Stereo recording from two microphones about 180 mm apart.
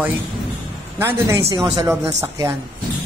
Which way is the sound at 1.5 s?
20° right (ahead or behind).